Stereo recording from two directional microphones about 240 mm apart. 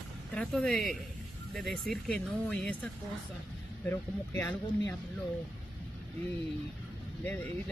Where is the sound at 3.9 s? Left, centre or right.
Centre.